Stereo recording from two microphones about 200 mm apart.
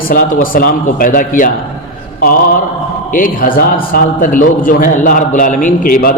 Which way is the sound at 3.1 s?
45° left (ahead or behind).